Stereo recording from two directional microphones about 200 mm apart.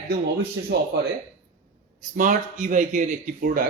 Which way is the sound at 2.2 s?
40° right (ahead or behind).